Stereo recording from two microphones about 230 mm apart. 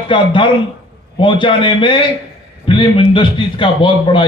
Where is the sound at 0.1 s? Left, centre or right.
Left.